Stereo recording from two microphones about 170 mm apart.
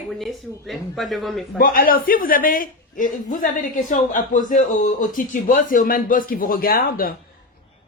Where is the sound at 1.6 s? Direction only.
55° left (ahead or behind).